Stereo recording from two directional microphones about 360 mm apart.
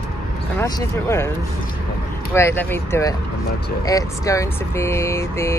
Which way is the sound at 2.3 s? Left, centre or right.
Centre.